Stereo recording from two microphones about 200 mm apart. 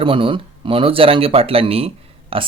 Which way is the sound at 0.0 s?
25° right (ahead or behind).